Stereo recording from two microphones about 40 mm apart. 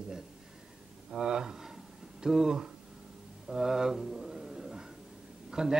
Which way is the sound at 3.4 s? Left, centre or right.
Centre.